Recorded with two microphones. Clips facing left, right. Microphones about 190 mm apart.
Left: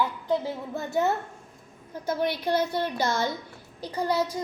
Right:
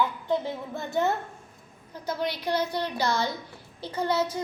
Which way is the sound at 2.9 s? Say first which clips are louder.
Left 1 dB; 50° left (ahead or behind).